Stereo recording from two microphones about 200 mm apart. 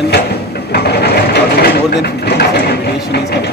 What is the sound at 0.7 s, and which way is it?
Sewing machine, 55° left (ahead or behind).